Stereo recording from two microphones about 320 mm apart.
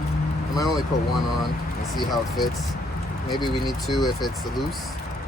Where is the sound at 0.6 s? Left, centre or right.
Centre.